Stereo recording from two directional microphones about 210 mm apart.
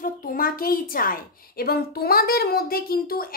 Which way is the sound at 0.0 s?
40° left (ahead or behind).